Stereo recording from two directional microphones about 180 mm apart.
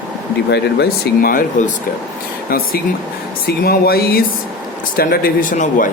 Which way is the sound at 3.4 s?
60° left (ahead or behind).